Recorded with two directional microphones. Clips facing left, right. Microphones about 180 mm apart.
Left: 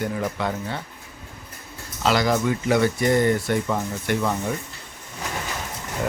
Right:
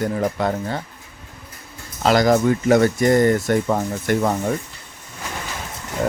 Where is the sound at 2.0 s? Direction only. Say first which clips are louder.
Right 5 dB; 45° right (ahead or behind).